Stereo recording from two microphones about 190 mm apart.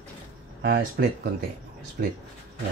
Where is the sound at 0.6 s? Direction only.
55° right (ahead or behind).